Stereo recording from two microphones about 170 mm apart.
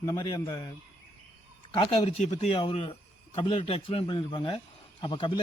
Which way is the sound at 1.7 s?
30° left (ahead or behind).